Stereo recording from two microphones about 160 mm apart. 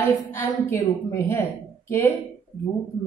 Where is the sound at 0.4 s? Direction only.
15° left (ahead or behind).